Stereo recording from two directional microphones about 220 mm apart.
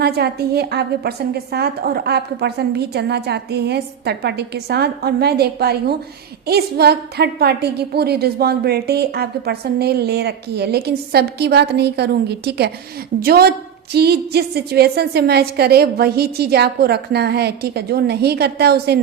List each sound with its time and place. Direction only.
0.0 s a woman's voice: 45° right (ahead or behind)